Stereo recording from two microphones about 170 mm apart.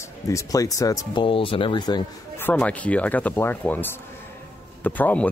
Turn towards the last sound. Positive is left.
turn(degrees=10)  # may be behind; listen again after turning